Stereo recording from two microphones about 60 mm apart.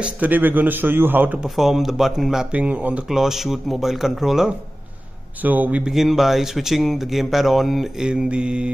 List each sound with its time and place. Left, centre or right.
0.0 s a man's voice: right
1.4 s speech: centre
2.5 s speech: right
3.1 s speech: centre
5.4 s speech: right
5.9 s speech: centre
8.0 s mantra: centre